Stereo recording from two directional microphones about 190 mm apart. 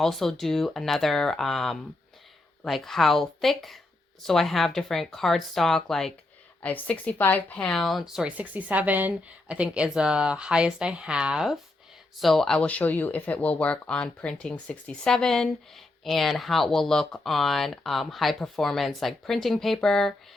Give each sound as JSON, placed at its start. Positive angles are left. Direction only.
{"t": 0.0, "sound": "a woman's voice", "side_deg": 0}